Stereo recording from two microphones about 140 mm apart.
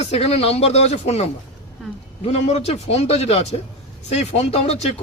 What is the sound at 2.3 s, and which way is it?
A man's voice, 50° left (ahead or behind).